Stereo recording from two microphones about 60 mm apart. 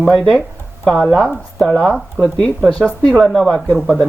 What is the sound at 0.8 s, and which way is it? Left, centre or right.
Speech, centre.